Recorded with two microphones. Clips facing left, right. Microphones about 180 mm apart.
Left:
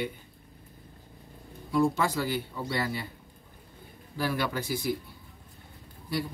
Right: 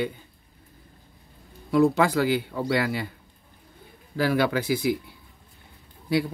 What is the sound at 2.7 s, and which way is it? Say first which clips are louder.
Speech: right 7 dB; 85° right.